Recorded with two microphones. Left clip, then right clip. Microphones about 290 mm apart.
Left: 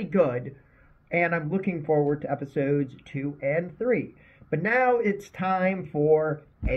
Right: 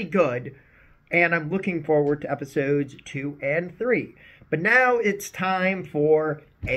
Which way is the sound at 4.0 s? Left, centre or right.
Right.